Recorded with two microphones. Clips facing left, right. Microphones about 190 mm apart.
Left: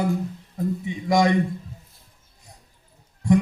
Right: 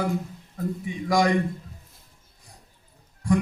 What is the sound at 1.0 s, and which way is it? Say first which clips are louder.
Speech: left 2 dB; 25° left (ahead or behind).